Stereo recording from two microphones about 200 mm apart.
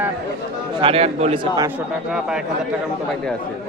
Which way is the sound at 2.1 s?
5° right (ahead or behind).